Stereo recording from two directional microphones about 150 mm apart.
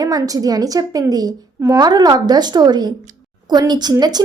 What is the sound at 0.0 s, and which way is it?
Speech, 25° right (ahead or behind).